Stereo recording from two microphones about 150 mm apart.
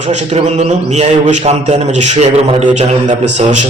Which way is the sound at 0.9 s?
50° right (ahead or behind).